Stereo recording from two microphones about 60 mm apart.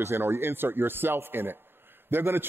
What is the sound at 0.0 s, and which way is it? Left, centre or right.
A man's voice, right.